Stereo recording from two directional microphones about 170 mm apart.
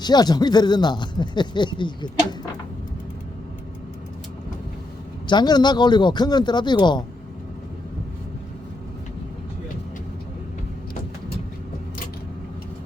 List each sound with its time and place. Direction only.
0.0 s speech: 25° left (ahead or behind)
5.3 s speech: 25° left (ahead or behind)